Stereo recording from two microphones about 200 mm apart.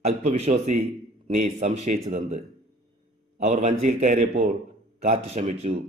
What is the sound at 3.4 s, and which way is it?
A man's voice, 35° right (ahead or behind).